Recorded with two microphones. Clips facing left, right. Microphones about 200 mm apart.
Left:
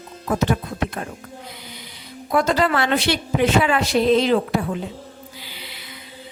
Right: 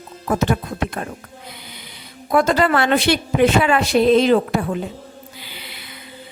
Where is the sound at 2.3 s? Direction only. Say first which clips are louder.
Right 3 dB; 50° right (ahead or behind).